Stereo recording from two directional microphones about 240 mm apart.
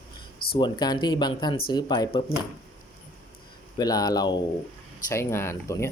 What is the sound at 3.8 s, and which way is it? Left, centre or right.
Speech, centre.